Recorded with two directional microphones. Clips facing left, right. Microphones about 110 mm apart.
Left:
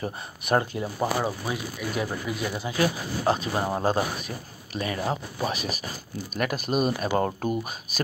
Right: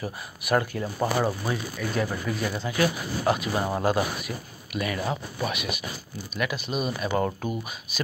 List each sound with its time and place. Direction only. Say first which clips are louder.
0.0 s speech: left 2 dB; 30° left (ahead or behind)
0.9 s speech: right 2 dB; 5° left (ahead or behind)
2.7 s speech: even; 30° left (ahead or behind)